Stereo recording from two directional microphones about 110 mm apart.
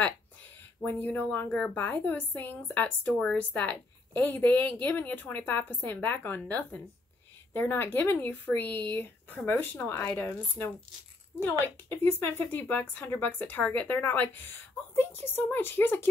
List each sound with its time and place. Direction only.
1.0 s a woman's voice: 15° left (ahead or behind)